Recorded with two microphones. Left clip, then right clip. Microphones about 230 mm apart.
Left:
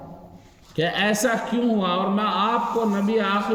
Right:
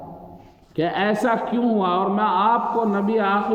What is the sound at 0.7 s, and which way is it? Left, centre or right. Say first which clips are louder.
Speech: right 1 dB; left.